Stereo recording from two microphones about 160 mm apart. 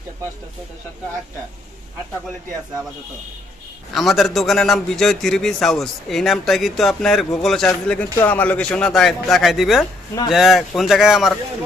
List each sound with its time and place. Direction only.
3.9 s a man's voice: centre (ahead or behind)